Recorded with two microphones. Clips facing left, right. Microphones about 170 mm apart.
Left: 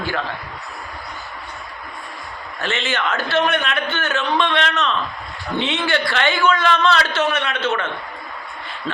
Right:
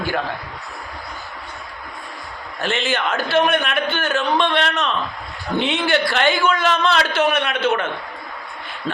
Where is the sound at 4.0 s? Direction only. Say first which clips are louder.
Right 1 dB; 35° right (ahead or behind).